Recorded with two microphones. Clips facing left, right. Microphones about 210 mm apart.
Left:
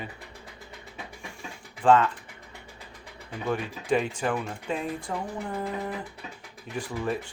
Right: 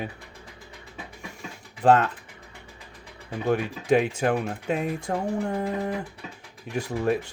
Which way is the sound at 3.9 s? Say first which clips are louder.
Right 4 dB; 60° right (ahead or behind).